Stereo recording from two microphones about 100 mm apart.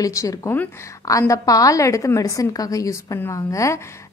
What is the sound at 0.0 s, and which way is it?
A woman's voice, 35° left (ahead or behind).